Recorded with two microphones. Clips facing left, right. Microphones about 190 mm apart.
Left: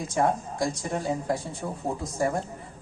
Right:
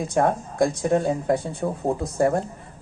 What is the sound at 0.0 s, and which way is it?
A woman's voice, 60° right (ahead or behind).